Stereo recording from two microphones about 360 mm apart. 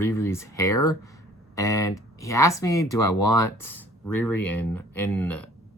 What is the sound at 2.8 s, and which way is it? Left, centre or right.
Speech, left.